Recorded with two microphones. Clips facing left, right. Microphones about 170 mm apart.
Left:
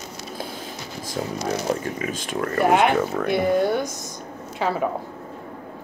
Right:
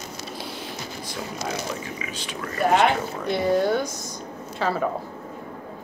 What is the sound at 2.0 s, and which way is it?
Speech, 50° left (ahead or behind).